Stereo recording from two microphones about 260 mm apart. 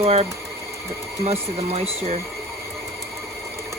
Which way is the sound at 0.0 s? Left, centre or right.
Right.